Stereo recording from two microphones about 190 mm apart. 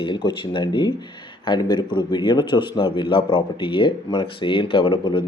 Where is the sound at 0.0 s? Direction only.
25° left (ahead or behind).